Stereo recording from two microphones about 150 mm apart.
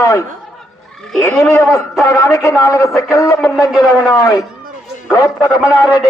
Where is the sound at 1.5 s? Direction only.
20° left (ahead or behind).